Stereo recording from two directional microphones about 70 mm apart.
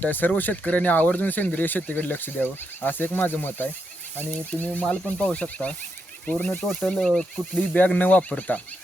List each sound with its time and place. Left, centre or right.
0.0 s speech: left
6.8 s speech: centre
7.7 s speech: left